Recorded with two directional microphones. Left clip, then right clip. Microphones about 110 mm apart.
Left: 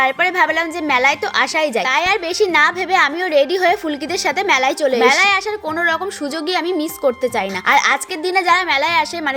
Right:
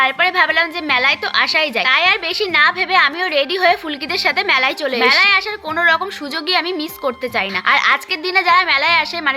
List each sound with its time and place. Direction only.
0.0 s a woman's voice: 40° left (ahead or behind)
7.0 s a woman's voice: 35° left (ahead or behind)